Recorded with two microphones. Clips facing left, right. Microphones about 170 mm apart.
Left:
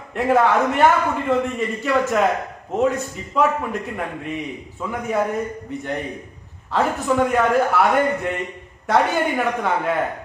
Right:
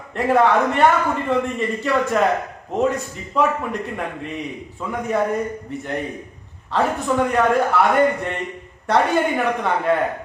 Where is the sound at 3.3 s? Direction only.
Centre (ahead or behind).